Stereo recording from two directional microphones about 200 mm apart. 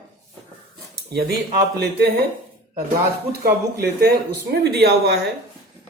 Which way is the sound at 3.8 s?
50° right (ahead or behind).